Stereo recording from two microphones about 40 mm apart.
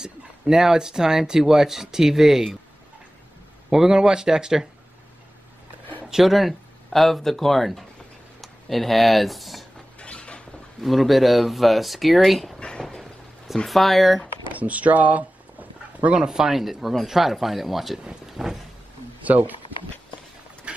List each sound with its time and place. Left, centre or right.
0.0 s speech: centre
3.7 s speech: centre
6.0 s speech: centre
9.9 s a sound: left
10.8 s speech: centre
12.5 s a sound: left
13.7 s speech: centre
14.5 s speech: right
16.2 s speech: centre
18.2 s vehicle: centre
19.2 s speech: right
20.7 s a sound: right